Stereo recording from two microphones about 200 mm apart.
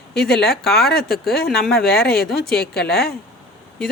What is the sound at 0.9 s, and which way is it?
Speech, 50° left (ahead or behind).